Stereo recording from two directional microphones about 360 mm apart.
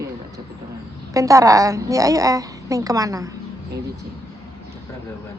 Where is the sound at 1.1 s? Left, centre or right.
Centre.